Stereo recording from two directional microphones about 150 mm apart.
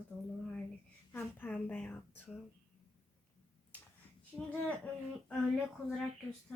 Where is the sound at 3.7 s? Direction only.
10° left (ahead or behind).